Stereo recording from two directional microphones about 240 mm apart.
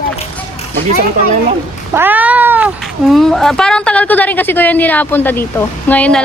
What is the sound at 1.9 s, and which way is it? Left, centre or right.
Cat, centre.